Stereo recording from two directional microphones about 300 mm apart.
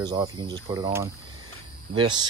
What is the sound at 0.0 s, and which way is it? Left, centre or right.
Speech, centre.